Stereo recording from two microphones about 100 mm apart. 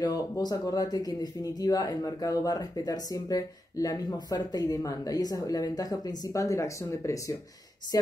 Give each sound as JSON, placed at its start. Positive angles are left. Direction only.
{"t": 0.0, "sound": "speech", "side_deg": 40}